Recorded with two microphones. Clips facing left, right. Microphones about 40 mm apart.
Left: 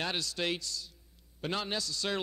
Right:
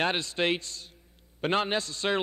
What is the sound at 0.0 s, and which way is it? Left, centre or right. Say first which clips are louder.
A man's voice: right 7 dB; right.